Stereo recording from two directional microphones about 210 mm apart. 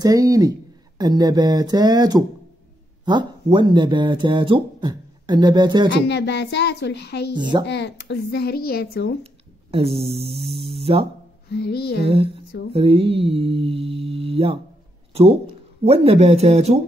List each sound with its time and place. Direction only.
0.0 s speech: 15° right (ahead or behind)
5.9 s a woman's voice: 55° left (ahead or behind)
9.2 s a sound: 30° right (ahead or behind)
11.4 s a woman's voice: 50° left (ahead or behind)
12.7 s speech: 25° right (ahead or behind)
15.8 s speech: 30° right (ahead or behind)